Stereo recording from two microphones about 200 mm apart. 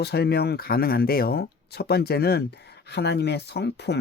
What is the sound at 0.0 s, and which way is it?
Speech, 55° left (ahead or behind).